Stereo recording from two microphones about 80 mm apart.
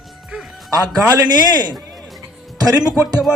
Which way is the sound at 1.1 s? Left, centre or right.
Right.